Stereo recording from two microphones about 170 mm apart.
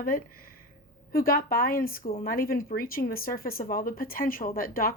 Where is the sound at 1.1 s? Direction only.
60° left (ahead or behind).